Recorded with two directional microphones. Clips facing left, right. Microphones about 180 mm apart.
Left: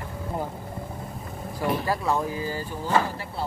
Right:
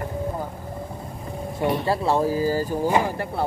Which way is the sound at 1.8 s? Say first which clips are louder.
Right 4 dB; 30° right (ahead or behind).